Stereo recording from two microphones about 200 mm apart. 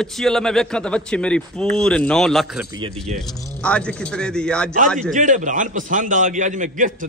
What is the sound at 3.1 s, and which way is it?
Speech, 40° right (ahead or behind).